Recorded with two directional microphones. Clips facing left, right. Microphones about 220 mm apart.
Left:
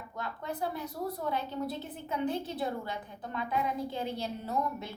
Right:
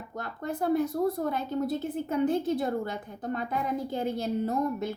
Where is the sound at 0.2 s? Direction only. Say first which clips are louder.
Right 4 dB; 50° right (ahead or behind).